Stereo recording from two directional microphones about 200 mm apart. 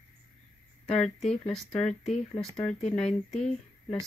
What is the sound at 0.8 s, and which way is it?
Speech, 5° left (ahead or behind).